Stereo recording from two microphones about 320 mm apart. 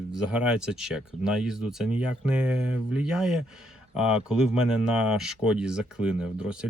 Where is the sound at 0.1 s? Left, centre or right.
Centre.